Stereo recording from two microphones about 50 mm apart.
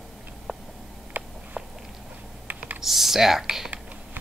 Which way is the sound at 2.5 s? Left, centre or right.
Right.